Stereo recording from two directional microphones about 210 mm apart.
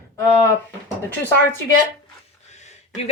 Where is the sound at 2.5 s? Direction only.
35° left (ahead or behind).